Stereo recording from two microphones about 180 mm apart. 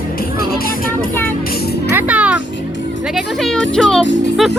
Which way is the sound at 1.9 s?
10° right (ahead or behind).